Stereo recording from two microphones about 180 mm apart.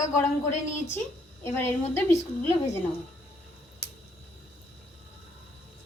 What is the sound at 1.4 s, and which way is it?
A woman's voice, 10° left (ahead or behind).